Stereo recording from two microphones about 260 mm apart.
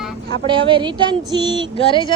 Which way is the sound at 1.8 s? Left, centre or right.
Centre.